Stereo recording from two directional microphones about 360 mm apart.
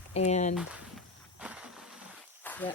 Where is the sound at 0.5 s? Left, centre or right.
Centre.